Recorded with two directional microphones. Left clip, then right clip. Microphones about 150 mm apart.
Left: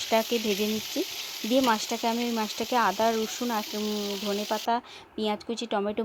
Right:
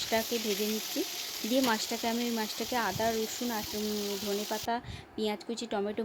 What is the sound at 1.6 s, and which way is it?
A woman's voice, 25° left (ahead or behind).